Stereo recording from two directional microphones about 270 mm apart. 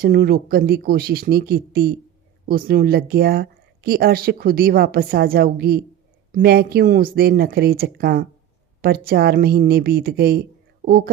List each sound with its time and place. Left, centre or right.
0.0 s speech: right